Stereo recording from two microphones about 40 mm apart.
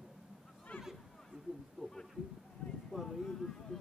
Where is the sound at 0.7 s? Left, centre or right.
Left.